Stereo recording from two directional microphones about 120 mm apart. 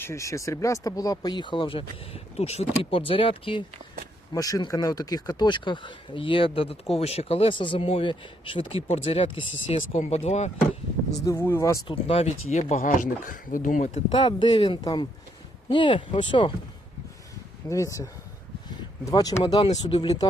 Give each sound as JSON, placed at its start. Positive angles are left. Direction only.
{"t": 0.0, "sound": "speech", "side_deg": 25}
{"t": 3.1, "sound": "speech", "side_deg": 50}
{"t": 4.4, "sound": "speech", "side_deg": 30}
{"t": 10.0, "sound": "speech", "side_deg": 65}
{"t": 11.3, "sound": "speech", "side_deg": 20}
{"t": 11.9, "sound": "speech", "side_deg": 55}
{"t": 14.2, "sound": "speech", "side_deg": 40}
{"t": 17.7, "sound": "speech", "side_deg": 25}